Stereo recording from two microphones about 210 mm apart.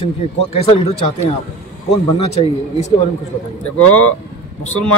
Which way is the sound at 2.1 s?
30° left (ahead or behind).